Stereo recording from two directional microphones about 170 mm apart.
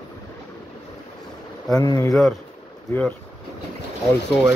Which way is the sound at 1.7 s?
20° left (ahead or behind).